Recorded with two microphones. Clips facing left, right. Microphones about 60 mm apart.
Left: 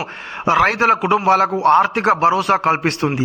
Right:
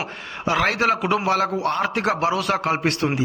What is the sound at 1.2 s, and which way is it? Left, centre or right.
A man's voice, left.